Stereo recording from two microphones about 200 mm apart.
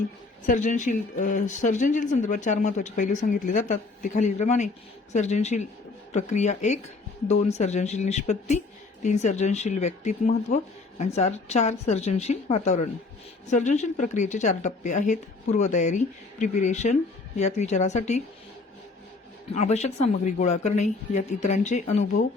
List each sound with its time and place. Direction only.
0.4 s a woman's voice: 40° left (ahead or behind)
19.5 s a woman's voice: 35° left (ahead or behind)